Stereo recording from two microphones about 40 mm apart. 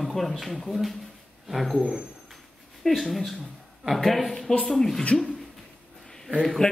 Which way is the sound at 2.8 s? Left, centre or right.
Centre.